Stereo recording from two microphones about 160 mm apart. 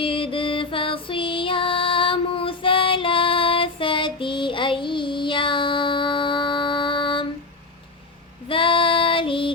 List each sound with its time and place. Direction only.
0.0 s music: 35° left (ahead or behind)
8.4 s child singing: 35° left (ahead or behind)